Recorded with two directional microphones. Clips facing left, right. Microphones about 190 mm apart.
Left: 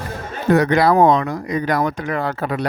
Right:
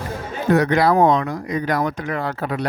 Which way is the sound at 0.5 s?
90° left.